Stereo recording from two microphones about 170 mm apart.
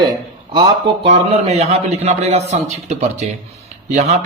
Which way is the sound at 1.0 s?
40° right (ahead or behind).